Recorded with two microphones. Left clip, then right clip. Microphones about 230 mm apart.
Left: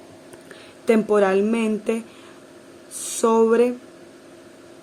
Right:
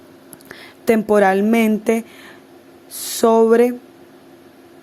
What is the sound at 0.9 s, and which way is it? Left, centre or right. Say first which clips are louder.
A woman's voice: right 4 dB; right.